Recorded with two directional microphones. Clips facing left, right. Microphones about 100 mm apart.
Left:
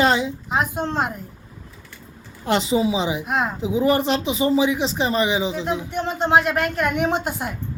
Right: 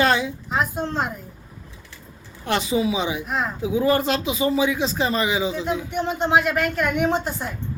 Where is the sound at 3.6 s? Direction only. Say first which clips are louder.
Even; 25° left (ahead or behind).